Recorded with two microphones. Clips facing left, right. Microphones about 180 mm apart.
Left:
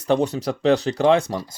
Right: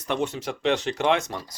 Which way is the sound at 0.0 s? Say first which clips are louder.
Left 7 dB; 35° left (ahead or behind).